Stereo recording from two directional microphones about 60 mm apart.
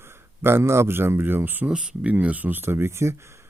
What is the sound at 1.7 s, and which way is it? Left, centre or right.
Speech, centre.